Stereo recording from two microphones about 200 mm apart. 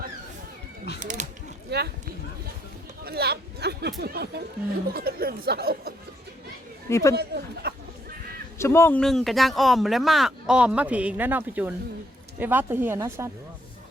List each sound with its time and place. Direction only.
0.9 s a sound: 40° right (ahead or behind)
1.7 s speech: 55° right (ahead or behind)
6.9 s speech: 15° left (ahead or behind)
7.2 s speech: 55° right (ahead or behind)
8.5 s a woman's voice: 15° left (ahead or behind); by 13.3 s 15° right (ahead or behind)